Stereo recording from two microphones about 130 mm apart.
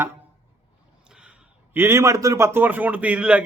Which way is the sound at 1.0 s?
5° right (ahead or behind).